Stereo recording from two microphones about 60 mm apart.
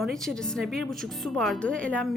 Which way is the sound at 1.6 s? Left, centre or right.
Centre.